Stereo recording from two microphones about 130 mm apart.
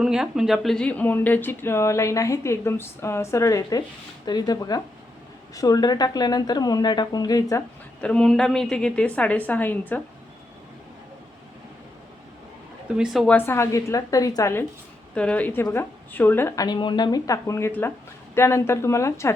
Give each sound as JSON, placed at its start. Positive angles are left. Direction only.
{"t": 0.0, "sound": "speech", "side_deg": -5}
{"t": 8.0, "sound": "a woman's voice", "side_deg": 5}
{"t": 13.0, "sound": "a woman's voice", "side_deg": 0}
{"t": 13.3, "sound": "speech", "side_deg": 15}
{"t": 15.1, "sound": "a woman's voice", "side_deg": 10}
{"t": 16.6, "sound": "speech", "side_deg": 35}